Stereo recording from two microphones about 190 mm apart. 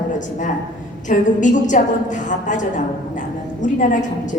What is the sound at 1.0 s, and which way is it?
A woman's voice, 40° left (ahead or behind).